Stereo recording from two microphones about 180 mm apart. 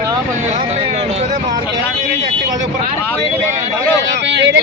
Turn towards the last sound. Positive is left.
turn(degrees=-75)  # may be behind; listen again after turning